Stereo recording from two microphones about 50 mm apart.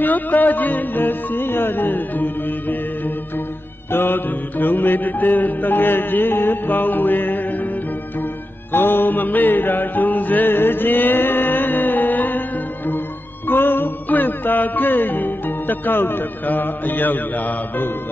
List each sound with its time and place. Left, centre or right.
0.0 s mantra: left
3.9 s mantra: left
8.7 s mantra: left
13.5 s music: left